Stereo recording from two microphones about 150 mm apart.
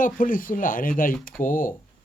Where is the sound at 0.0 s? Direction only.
65° left (ahead or behind).